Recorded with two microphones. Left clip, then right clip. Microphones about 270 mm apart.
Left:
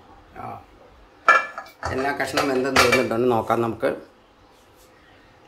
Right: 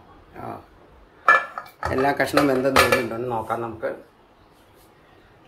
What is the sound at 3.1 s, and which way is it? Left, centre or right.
Speech, left.